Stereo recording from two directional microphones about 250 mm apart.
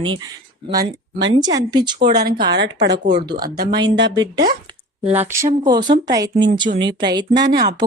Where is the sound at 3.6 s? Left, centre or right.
Centre.